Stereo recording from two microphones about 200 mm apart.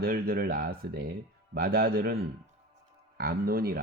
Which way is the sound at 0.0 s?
50° right (ahead or behind).